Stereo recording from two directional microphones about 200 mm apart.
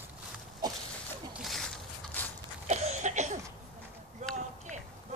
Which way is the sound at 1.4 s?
Centre (ahead or behind).